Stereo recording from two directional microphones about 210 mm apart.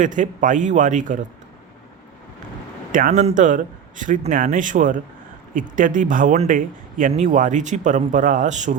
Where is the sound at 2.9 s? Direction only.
40° right (ahead or behind).